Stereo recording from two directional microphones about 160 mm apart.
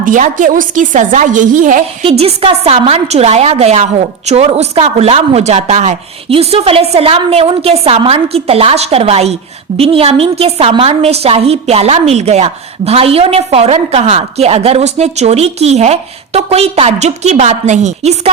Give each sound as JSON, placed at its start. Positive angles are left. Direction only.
{"t": 0.0, "sound": "speech", "side_deg": -55}
{"t": 2.0, "sound": "a woman's voice", "side_deg": -40}